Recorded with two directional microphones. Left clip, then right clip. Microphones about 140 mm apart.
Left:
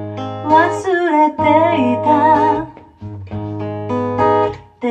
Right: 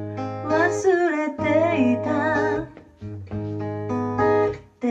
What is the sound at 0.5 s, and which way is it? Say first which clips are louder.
Music: left 7 dB; 55° right (ahead or behind).